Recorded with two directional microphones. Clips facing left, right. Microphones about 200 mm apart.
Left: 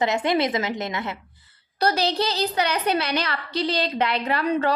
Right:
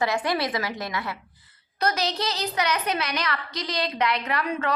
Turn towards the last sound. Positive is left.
turn(degrees=35)  # may be behind; listen again after turning